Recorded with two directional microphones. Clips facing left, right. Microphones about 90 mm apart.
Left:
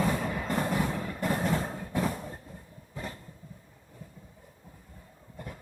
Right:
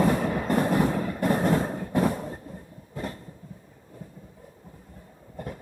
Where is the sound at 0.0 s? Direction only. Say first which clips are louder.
Right 6 dB; 50° right (ahead or behind).